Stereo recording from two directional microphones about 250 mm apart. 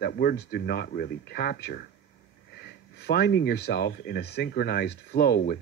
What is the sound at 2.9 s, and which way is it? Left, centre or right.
Speech, left.